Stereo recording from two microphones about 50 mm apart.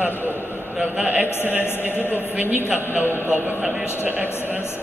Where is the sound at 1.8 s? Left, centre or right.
Right.